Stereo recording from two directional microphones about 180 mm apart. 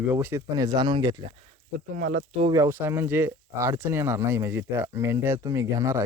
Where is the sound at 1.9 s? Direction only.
50° right (ahead or behind).